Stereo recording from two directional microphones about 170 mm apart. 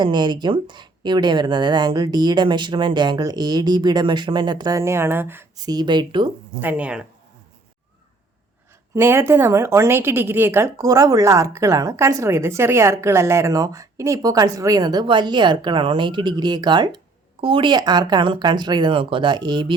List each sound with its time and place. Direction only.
0.0 s speech: 25° right (ahead or behind)
6.6 s speech: 10° right (ahead or behind)
9.0 s speech: 15° right (ahead or behind)